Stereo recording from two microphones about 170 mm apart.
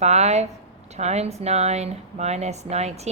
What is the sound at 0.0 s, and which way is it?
Speech, 40° right (ahead or behind).